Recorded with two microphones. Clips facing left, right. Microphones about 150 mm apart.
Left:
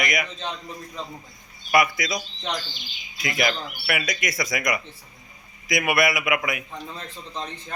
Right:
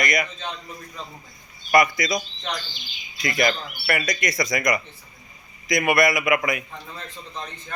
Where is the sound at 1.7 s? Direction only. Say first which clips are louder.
Right 2 dB; 5° left (ahead or behind).